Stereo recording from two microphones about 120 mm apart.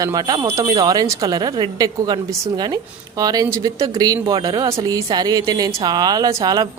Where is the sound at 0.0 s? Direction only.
30° right (ahead or behind).